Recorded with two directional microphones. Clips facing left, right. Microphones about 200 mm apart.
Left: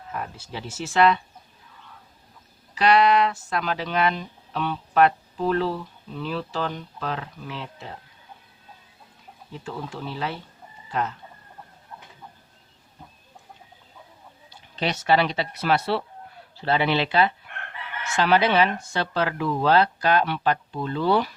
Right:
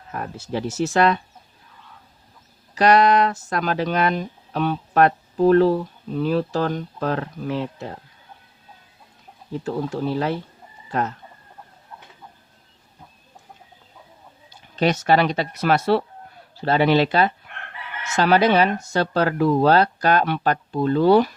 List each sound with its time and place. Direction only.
0.1 s speech: 45° right (ahead or behind)
2.7 s speech: 45° right (ahead or behind)
9.5 s speech: 40° right (ahead or behind)
14.8 s speech: 45° right (ahead or behind)